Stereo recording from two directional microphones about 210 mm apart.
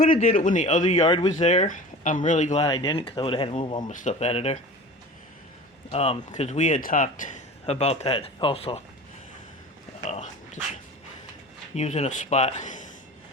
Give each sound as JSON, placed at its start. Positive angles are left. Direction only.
{"t": 0.3, "sound": "a man's voice", "side_deg": 40}
{"t": 1.3, "sound": "a man's voice", "side_deg": 35}
{"t": 2.6, "sound": "speech", "side_deg": 20}
{"t": 3.8, "sound": "a man's voice", "side_deg": 35}
{"t": 5.9, "sound": "a man's voice", "side_deg": 30}
{"t": 10.1, "sound": "speech", "side_deg": 35}
{"t": 11.7, "sound": "a man's voice", "side_deg": 30}